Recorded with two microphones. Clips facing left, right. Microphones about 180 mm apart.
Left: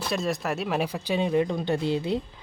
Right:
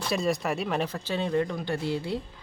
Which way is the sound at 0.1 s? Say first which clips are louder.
Right 1 dB; centre (ahead or behind).